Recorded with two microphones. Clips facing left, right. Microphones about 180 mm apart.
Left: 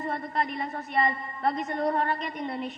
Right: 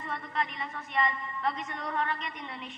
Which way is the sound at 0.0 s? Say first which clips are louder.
Left 5 dB; 40° left (ahead or behind).